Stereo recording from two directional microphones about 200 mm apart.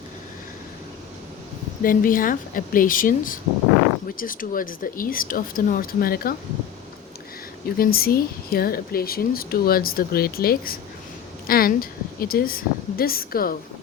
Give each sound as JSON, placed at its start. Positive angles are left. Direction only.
{"t": 1.8, "sound": "speech", "side_deg": 45}
{"t": 7.8, "sound": "speech", "side_deg": 50}